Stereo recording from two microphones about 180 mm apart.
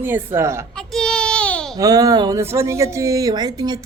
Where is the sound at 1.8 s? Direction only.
20° right (ahead or behind).